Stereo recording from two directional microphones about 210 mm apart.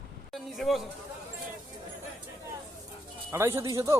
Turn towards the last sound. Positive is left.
turn(degrees=-15)  # may be behind; listen again after turning